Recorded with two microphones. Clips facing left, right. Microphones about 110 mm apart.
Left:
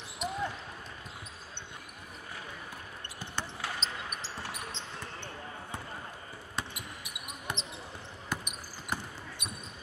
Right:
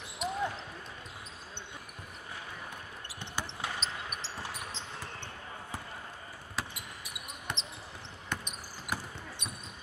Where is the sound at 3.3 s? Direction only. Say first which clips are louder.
Even; centre (ahead or behind).